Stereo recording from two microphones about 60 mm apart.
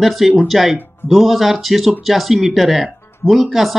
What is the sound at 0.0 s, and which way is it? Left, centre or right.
Speech, centre.